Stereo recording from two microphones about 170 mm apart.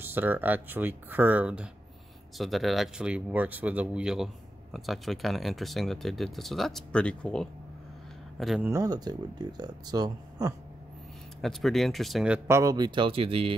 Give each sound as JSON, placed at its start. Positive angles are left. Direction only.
{"t": 0.0, "sound": "speech", "side_deg": -10}
{"t": 8.6, "sound": "speech", "side_deg": -20}
{"t": 11.4, "sound": "speech", "side_deg": 0}
{"t": 12.4, "sound": "speech", "side_deg": -20}